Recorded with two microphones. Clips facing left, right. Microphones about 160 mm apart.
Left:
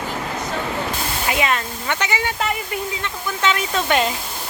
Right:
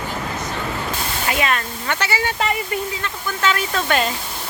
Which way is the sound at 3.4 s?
20° left (ahead or behind).